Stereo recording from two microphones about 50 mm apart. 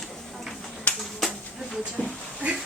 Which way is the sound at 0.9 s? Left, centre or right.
Left.